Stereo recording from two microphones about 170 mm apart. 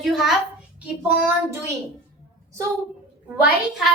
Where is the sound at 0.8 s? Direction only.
10° right (ahead or behind).